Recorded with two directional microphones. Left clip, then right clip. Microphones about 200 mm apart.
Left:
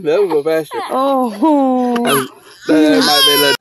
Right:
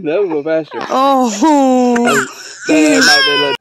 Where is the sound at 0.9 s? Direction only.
Centre (ahead or behind).